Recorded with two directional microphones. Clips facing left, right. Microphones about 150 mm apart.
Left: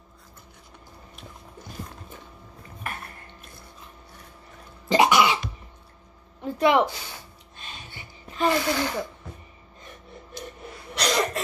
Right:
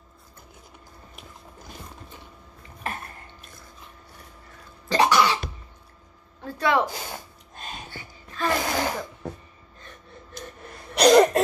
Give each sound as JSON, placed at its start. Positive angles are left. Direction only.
{"t": 4.8, "sound": "cough", "side_deg": 20}
{"t": 6.4, "sound": "a sound", "side_deg": 20}
{"t": 6.9, "sound": "a sound", "side_deg": -45}
{"t": 7.9, "sound": "music", "side_deg": 20}
{"t": 8.5, "sound": "speech", "side_deg": -45}
{"t": 10.7, "sound": "cough", "side_deg": -50}